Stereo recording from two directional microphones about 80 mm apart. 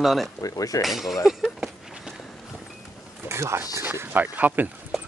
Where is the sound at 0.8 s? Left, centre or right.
Centre.